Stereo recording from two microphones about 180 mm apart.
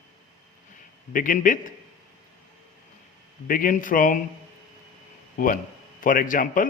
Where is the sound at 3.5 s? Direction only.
50° left (ahead or behind).